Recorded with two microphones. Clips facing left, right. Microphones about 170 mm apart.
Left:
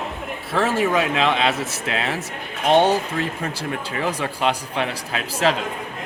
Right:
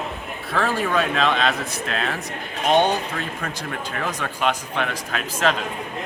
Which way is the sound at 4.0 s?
10° left (ahead or behind).